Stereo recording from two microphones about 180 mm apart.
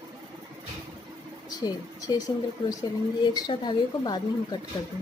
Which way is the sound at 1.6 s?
20° left (ahead or behind).